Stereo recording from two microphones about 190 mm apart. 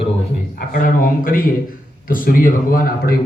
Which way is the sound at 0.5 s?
45° left (ahead or behind).